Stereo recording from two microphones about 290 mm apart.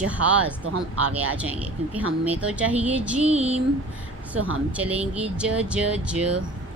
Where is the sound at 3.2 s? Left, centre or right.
Right.